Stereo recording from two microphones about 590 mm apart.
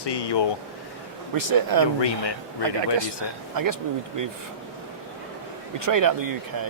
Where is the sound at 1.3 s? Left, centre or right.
Right.